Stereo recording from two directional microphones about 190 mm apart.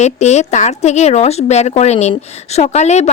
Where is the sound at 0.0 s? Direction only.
35° left (ahead or behind).